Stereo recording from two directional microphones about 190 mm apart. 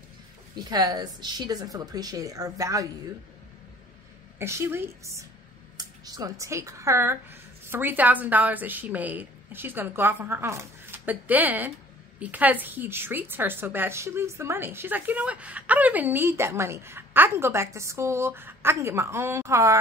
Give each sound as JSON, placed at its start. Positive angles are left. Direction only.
{"t": 0.6, "sound": "speech", "side_deg": -20}
{"t": 4.4, "sound": "a woman's voice", "side_deg": -15}